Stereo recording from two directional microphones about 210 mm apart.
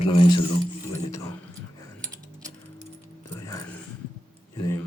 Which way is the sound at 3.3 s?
15° left (ahead or behind).